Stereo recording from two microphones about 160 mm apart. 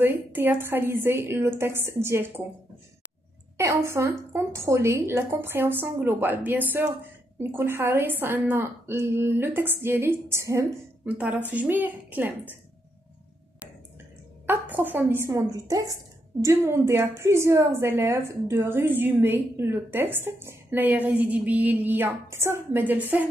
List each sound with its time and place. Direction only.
0.0 s a woman's voice: 15° right (ahead or behind)
3.5 s a woman's voice: 15° right (ahead or behind)
14.4 s a woman's voice: 10° right (ahead or behind)